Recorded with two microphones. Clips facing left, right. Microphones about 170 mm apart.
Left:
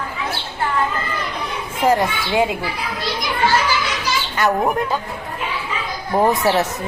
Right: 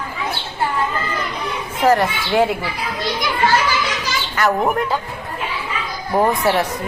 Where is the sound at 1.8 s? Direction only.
10° left (ahead or behind).